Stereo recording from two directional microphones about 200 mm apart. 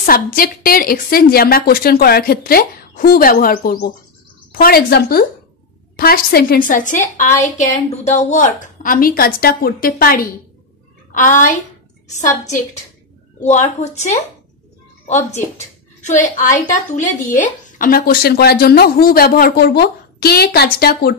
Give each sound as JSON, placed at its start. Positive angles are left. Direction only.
{"t": 0.0, "sound": "a woman's voice", "side_deg": 45}